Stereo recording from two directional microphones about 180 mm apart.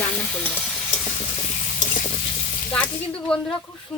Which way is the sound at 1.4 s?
35° left (ahead or behind).